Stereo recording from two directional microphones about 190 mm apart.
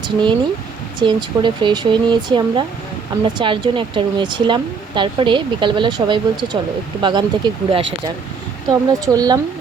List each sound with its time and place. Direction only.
0.0 s speech: 25° right (ahead or behind)
8.9 s speech: 20° right (ahead or behind)